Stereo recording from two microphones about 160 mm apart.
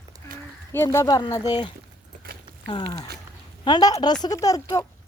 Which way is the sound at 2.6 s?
30° left (ahead or behind).